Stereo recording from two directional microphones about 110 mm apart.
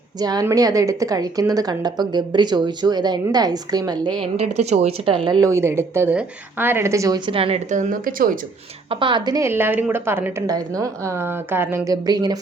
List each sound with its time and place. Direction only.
0.2 s a woman's voice: 35° right (ahead or behind)
4.5 s speech: 80° right
5.0 s a woman's voice: 50° right (ahead or behind)
5.4 s a woman's voice: 25° right (ahead or behind)
7.3 s a woman's voice: 60° right (ahead or behind)
8.9 s a woman's voice: 50° right (ahead or behind)
9.4 s a woman's voice: 20° right (ahead or behind)
10.4 s a woman's voice: 30° right (ahead or behind)
12.0 s a woman's voice: 40° right (ahead or behind)